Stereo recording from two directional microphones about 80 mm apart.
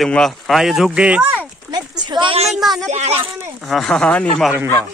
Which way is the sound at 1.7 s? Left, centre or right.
Right.